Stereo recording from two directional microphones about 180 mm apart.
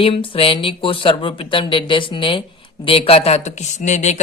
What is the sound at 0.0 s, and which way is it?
Speech, 30° left (ahead or behind).